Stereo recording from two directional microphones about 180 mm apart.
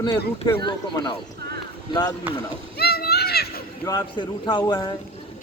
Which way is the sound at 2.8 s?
60° left (ahead or behind).